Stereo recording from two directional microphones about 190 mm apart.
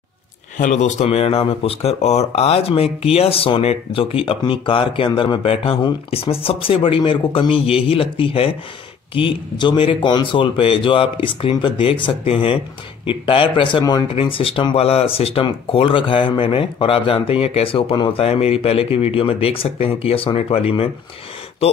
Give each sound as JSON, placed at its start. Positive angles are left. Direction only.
{"t": 0.6, "sound": "speech", "side_deg": 40}